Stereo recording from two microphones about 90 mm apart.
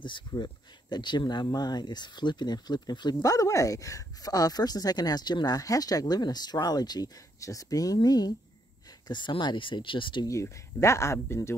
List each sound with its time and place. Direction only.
0.3 s speech: 55° left (ahead or behind)
3.2 s speech: 35° left (ahead or behind)
9.0 s speech: 60° left (ahead or behind)
10.2 s speech: 35° left (ahead or behind)